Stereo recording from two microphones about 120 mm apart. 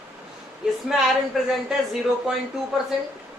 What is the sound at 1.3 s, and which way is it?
Speech, 5° right (ahead or behind).